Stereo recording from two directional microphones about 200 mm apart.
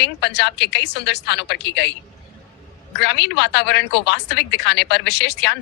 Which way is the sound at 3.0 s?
60° left (ahead or behind).